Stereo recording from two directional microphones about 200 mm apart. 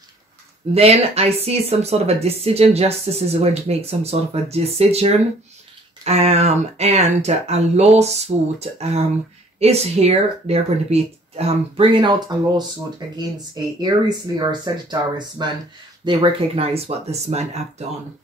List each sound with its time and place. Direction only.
0.7 s speech: 30° right (ahead or behind)
13.7 s speech: 20° right (ahead or behind)